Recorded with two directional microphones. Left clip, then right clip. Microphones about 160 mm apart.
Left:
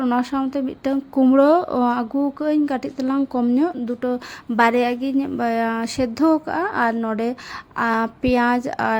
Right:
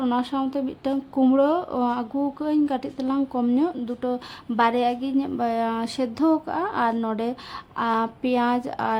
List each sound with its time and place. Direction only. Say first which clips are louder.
0.0 s a woman's voice: left 3 dB; 10° left (ahead or behind)
6.9 s a woman's voice: left 3 dB; centre (ahead or behind)
7.8 s a woman's voice: left 3 dB; 15° left (ahead or behind)